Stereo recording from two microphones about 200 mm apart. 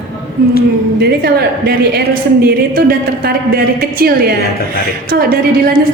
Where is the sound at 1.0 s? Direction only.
50° right (ahead or behind).